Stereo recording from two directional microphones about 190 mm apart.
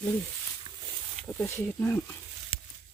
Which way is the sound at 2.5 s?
30° left (ahead or behind).